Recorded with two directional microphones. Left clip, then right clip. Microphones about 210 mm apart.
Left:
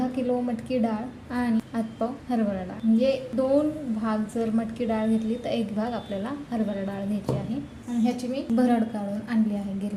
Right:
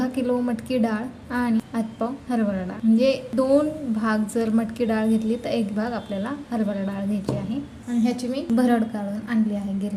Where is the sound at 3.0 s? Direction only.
20° right (ahead or behind).